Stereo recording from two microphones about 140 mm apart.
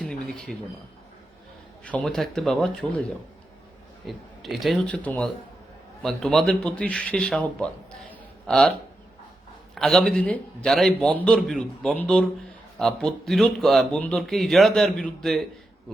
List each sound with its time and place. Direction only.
0.0 s a sound: 5° left (ahead or behind)
1.8 s speech: 10° left (ahead or behind)
4.0 s a man's voice: centre (ahead or behind)
5.0 s a man's voice: 10° left (ahead or behind)
9.7 s speech: centre (ahead or behind)